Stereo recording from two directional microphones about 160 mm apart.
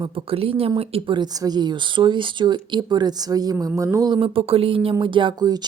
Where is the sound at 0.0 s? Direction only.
35° right (ahead or behind).